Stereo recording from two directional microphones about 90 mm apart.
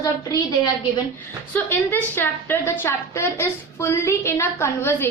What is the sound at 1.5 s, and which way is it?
A woman's voice, 25° left (ahead or behind).